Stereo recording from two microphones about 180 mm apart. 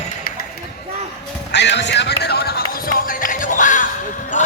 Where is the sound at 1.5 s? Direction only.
75° left (ahead or behind); by 3.9 s 45° left (ahead or behind).